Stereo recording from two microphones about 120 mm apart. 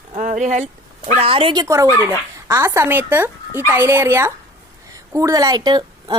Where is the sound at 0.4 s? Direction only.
80° right; by 1.6 s 45° right (ahead or behind).